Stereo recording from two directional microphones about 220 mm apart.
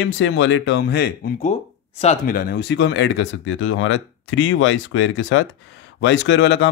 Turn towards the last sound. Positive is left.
turn(degrees=55)  # may be behind; listen again after turning